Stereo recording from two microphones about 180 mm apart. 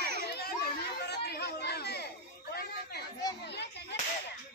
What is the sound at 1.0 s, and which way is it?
Chatter, 65° left (ahead or behind).